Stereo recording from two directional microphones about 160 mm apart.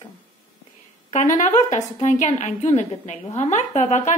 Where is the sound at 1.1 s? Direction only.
50° left (ahead or behind).